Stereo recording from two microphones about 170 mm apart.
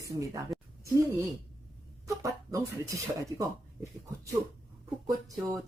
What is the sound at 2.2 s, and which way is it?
Speech, 20° right (ahead or behind).